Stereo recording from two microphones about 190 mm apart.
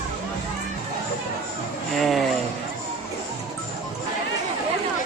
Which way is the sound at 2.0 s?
Centre (ahead or behind).